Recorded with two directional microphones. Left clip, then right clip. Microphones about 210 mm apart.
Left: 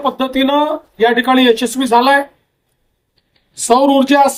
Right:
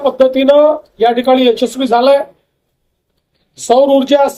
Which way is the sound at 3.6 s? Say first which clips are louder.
Right 2 dB; 50° left (ahead or behind).